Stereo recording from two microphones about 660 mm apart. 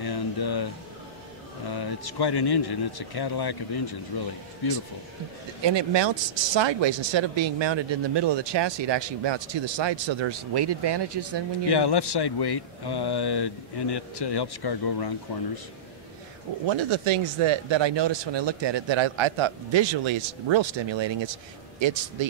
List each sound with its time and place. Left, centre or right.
0.0 s a sound: left
1.7 s a man's voice: left
5.6 s speech: right
11.7 s a man's voice: left
16.6 s speech: right